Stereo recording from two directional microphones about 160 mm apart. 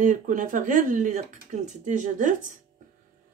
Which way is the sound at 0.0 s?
55° right (ahead or behind).